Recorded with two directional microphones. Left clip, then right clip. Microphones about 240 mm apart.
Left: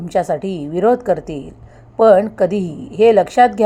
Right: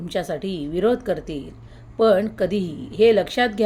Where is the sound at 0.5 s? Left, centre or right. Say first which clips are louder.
Left 4 dB; left.